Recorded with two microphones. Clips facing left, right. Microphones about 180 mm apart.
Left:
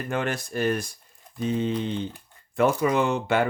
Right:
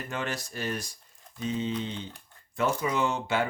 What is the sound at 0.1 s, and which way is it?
Speech, 55° left (ahead or behind).